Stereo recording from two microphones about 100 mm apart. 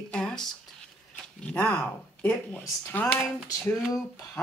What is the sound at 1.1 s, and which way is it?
A woman's voice, 10° left (ahead or behind).